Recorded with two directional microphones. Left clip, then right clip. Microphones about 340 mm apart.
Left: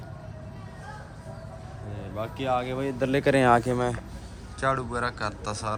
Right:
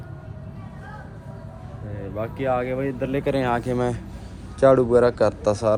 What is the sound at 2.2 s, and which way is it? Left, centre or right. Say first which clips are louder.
A man's voice: right 4 dB; centre.